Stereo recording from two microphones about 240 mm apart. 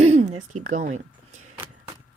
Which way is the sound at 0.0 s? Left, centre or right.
Right.